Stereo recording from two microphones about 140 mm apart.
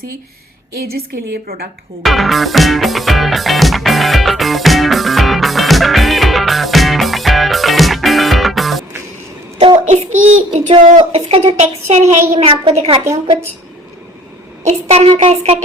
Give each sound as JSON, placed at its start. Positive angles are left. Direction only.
{"t": 2.0, "sound": "music", "side_deg": 0}
{"t": 9.9, "sound": "child singing", "side_deg": -50}
{"t": 10.9, "sound": "a woman's voice", "side_deg": -45}
{"t": 12.5, "sound": "a woman's voice", "side_deg": -40}
{"t": 14.6, "sound": "a woman's voice", "side_deg": -50}